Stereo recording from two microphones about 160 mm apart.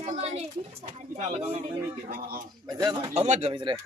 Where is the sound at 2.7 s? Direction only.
25° right (ahead or behind).